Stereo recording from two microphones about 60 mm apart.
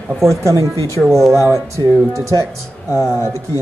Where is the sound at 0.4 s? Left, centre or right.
Right.